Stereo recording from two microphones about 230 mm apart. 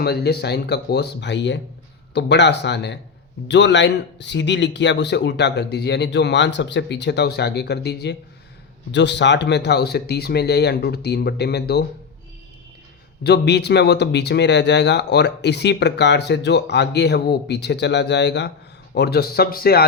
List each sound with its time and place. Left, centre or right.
0.0 s speech: left
13.2 s speech: left